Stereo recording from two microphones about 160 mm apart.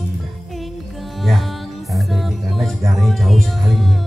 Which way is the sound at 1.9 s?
Centre (ahead or behind).